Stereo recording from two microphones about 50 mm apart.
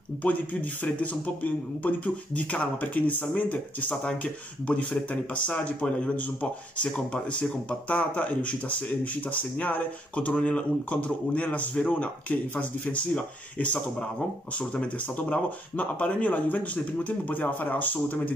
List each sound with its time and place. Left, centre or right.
0.2 s speech: left
4.0 s speech: left